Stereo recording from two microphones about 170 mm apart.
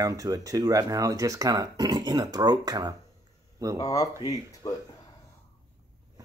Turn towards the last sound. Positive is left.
turn(degrees=25)  # may be behind; listen again after turning